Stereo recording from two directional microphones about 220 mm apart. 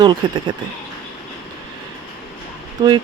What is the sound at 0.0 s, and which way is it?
Speech, 20° right (ahead or behind).